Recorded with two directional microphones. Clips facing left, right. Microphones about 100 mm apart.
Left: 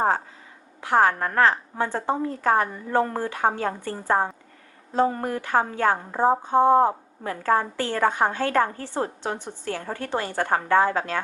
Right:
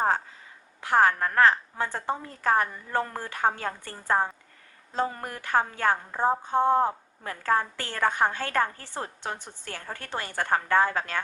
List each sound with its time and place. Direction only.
0.8 s a woman's voice: 15° left (ahead or behind)